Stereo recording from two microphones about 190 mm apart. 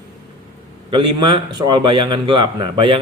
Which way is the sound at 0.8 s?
25° right (ahead or behind).